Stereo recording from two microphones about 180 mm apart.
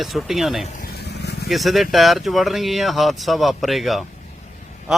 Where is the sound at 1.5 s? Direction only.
Centre (ahead or behind).